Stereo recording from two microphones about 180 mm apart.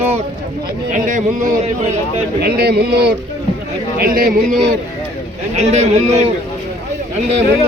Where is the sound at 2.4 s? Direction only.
60° right (ahead or behind).